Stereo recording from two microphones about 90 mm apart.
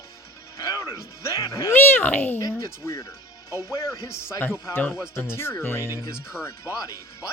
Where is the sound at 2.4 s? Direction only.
35° left (ahead or behind).